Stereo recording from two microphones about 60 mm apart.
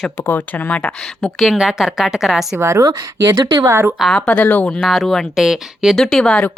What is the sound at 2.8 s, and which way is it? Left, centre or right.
Speech, right.